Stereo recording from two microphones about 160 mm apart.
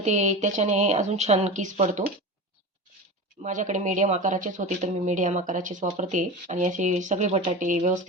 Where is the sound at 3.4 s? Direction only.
50° right (ahead or behind).